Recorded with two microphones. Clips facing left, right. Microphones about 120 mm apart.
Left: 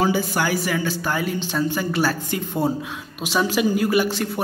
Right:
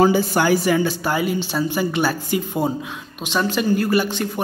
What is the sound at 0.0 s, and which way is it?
Speech, 35° right (ahead or behind).